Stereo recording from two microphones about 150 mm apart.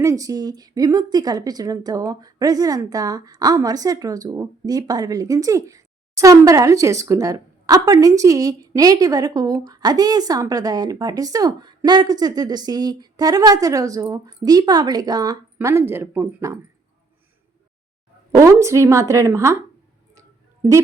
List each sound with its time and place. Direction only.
0.0 s speech: 20° right (ahead or behind)
15.5 s speech: 15° right (ahead or behind)
18.3 s speech: 20° right (ahead or behind)